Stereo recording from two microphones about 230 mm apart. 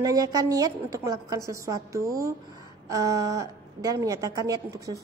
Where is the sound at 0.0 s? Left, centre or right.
Centre.